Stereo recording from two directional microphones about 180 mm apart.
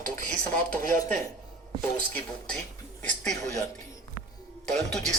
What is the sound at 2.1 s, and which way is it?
Speech, 5° left (ahead or behind).